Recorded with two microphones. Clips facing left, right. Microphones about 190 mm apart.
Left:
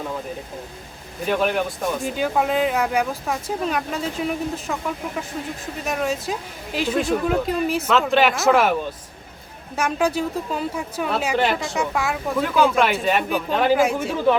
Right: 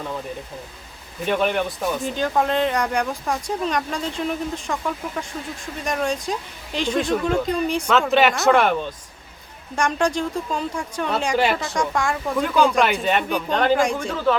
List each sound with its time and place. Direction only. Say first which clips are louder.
1.2 s speech: even; centre (ahead or behind)
14.1 s speech: left 2 dB; 15° left (ahead or behind)